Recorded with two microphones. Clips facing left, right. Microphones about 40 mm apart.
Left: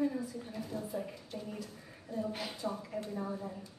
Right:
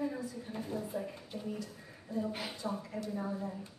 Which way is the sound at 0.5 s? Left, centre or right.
Right.